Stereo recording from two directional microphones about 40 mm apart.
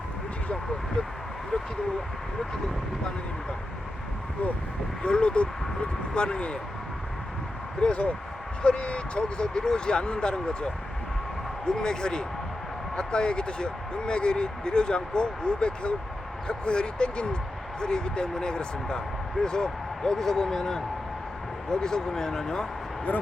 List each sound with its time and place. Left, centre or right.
5.0 s speech: left
7.8 s speech: left